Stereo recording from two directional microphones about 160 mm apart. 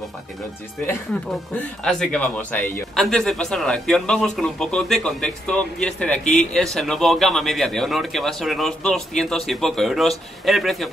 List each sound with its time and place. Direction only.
1.9 s a man's voice: 5° left (ahead or behind)